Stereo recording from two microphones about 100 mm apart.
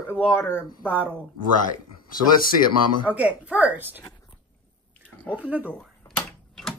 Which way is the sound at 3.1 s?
15° right (ahead or behind).